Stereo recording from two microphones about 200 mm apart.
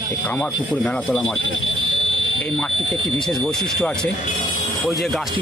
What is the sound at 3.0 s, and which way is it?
Speech, centre (ahead or behind).